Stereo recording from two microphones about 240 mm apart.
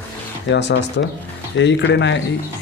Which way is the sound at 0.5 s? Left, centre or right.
Left.